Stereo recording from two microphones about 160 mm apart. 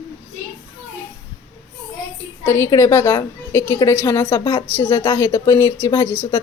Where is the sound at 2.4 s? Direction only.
15° left (ahead or behind).